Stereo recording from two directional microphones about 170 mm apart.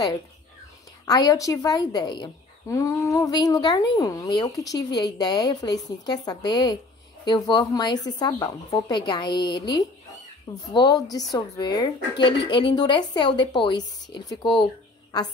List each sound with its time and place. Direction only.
1.0 s speech: 20° left (ahead or behind)